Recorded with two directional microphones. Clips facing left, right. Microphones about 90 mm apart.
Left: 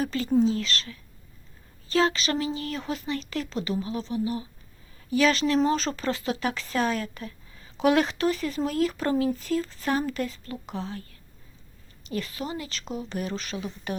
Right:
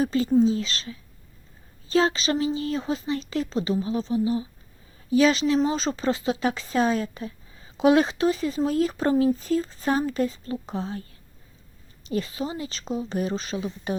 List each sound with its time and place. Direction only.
0.0 s speech: 25° right (ahead or behind)